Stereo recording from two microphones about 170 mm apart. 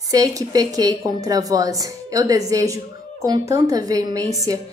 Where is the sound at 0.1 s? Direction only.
20° right (ahead or behind).